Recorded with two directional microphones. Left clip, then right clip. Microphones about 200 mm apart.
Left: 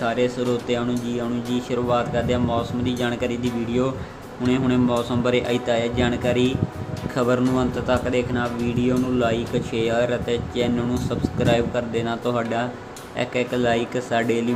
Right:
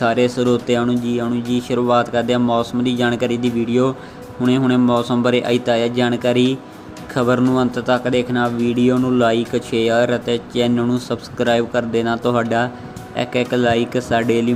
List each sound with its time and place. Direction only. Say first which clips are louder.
0.0 s speech: right 6 dB; 30° right (ahead or behind)